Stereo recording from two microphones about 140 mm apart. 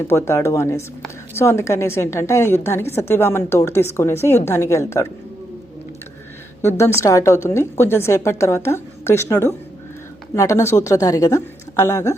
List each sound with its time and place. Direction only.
0.1 s a woman's voice: 20° left (ahead or behind)
6.7 s a woman's voice: 20° left (ahead or behind)